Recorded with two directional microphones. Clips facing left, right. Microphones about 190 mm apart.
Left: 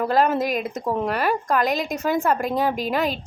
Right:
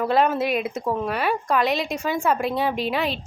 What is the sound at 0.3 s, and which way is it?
Speech, 40° left (ahead or behind).